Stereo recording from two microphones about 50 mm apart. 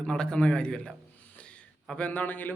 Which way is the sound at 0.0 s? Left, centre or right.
Centre.